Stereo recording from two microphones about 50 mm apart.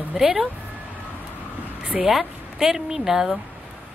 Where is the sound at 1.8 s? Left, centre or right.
Right.